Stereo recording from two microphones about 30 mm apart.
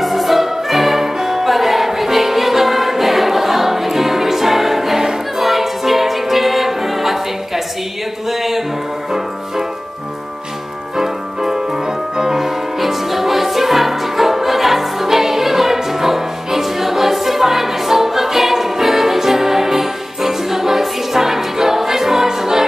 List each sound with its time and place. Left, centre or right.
0.0 s music: centre
11.0 s music: centre